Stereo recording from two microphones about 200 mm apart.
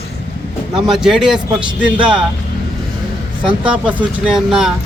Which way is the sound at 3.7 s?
5° right (ahead or behind).